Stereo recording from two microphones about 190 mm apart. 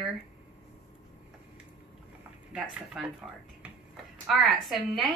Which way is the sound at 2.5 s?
5° right (ahead or behind).